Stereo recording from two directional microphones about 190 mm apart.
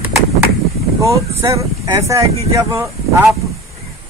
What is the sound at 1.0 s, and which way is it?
Speech, 15° right (ahead or behind).